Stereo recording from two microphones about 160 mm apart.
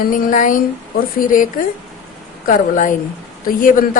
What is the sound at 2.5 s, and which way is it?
A woman's voice, 55° left (ahead or behind).